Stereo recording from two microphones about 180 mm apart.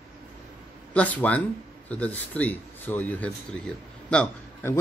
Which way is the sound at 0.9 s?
10° left (ahead or behind).